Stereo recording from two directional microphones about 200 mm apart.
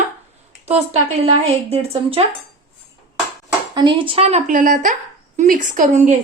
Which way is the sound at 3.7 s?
25° right (ahead or behind).